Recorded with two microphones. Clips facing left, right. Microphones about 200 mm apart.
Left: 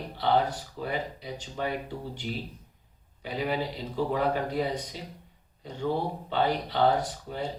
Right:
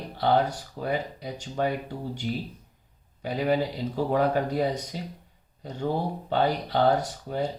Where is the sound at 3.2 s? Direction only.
45° right (ahead or behind).